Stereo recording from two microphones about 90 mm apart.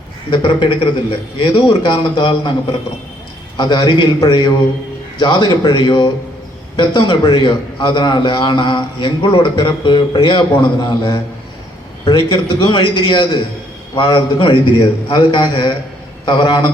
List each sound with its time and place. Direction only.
0.3 s a man's voice: 60° left (ahead or behind)
3.6 s a man's voice: 55° left (ahead or behind)